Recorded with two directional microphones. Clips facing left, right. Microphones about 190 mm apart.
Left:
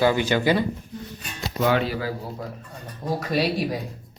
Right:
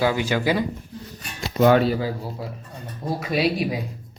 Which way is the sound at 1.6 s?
45° right (ahead or behind).